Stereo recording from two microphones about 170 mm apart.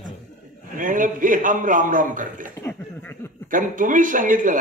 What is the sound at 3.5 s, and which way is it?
A man's voice, 50° right (ahead or behind).